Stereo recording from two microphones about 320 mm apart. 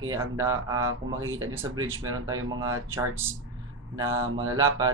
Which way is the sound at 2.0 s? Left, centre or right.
Centre.